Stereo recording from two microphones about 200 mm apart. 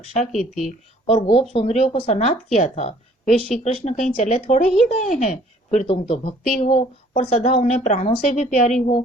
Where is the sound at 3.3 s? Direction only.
Centre (ahead or behind).